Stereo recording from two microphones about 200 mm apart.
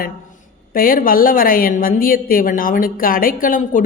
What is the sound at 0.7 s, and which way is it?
A woman's voice, 45° left (ahead or behind).